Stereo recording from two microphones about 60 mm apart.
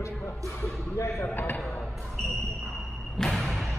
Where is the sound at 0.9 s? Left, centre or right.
Left.